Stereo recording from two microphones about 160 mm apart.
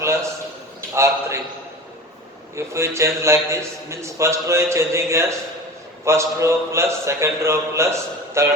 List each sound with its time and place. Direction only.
0.9 s a man's voice: 15° right (ahead or behind)
2.6 s a man's voice: 15° right (ahead or behind)